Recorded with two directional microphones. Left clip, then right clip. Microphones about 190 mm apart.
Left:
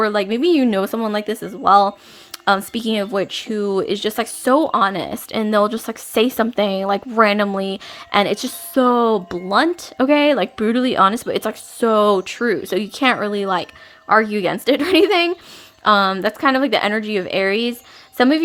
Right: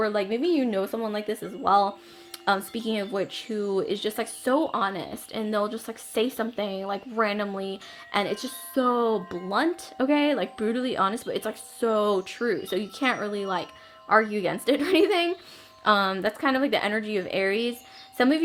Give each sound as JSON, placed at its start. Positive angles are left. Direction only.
{"t": 0.0, "sound": "a woman's voice", "side_deg": 35}